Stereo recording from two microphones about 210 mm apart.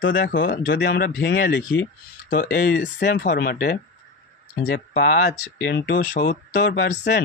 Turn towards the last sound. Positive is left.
turn(degrees=55)  # may be behind; listen again after turning